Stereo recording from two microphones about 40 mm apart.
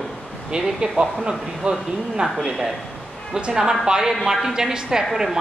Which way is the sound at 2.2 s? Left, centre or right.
Centre.